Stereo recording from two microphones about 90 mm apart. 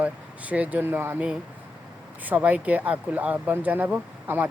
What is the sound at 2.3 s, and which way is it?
Speech, 15° right (ahead or behind).